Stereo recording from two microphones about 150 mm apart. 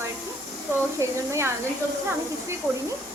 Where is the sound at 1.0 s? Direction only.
20° right (ahead or behind).